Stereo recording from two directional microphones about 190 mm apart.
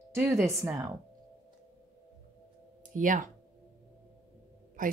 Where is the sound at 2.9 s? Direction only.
45° right (ahead or behind).